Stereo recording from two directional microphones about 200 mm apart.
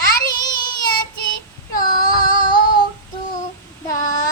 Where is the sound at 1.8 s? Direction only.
20° left (ahead or behind).